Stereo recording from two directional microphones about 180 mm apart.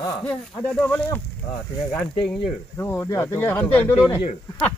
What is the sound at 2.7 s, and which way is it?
Speech, 10° left (ahead or behind).